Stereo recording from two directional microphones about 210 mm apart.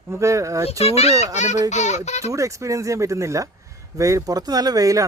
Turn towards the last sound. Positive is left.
turn(degrees=-15)  # may be behind; listen again after turning